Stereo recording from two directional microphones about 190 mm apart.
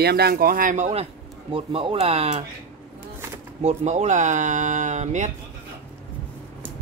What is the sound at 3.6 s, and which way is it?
Speech, 35° right (ahead or behind).